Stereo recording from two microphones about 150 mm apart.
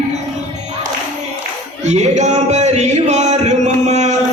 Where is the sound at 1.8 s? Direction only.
50° right (ahead or behind).